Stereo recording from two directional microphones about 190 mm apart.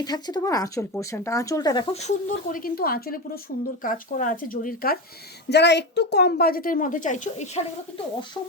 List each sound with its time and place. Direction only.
0.0 s a woman's voice: 20° left (ahead or behind); by 4.9 s 50° left (ahead or behind)
5.5 s a woman's voice: 65° left (ahead or behind); by 7.6 s 35° left (ahead or behind)